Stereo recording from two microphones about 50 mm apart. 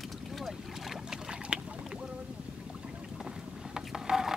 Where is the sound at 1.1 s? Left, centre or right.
Centre.